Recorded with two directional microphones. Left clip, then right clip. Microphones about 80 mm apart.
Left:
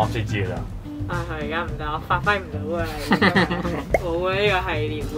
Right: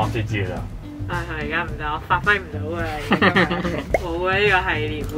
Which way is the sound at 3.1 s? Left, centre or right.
Left.